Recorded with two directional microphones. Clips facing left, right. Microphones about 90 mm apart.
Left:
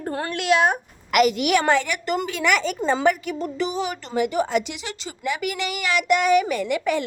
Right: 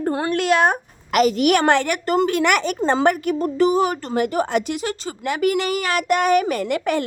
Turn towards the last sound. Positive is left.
turn(degrees=-55)  # may be behind; listen again after turning